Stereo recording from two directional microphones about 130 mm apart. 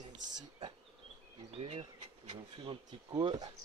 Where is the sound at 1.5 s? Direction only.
55° right (ahead or behind).